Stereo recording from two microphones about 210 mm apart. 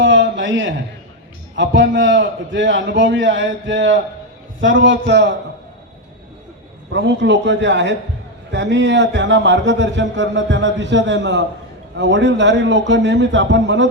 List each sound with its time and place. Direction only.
0.0 s a sound: 60° right (ahead or behind)
1.5 s a man's voice: 60° right (ahead or behind)
6.9 s a man's voice: 55° right (ahead or behind)